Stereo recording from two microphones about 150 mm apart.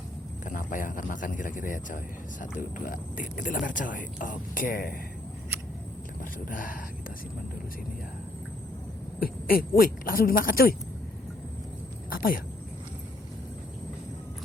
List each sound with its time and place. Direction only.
0.4 s speech: 60° left (ahead or behind)
6.5 s speech: 65° left (ahead or behind)
9.2 s speech: 75° left (ahead or behind)
12.1 s speech: 70° left (ahead or behind)